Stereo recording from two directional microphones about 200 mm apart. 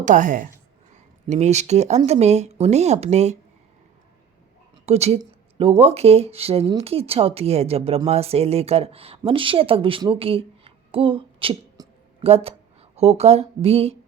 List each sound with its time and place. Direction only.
0.0 s a woman's voice: 40° right (ahead or behind)
4.9 s a woman's voice: 30° right (ahead or behind)